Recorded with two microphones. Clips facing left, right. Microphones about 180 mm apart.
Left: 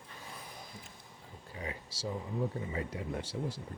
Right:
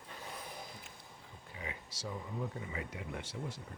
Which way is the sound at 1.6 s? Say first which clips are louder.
Left 5 dB; 35° left (ahead or behind).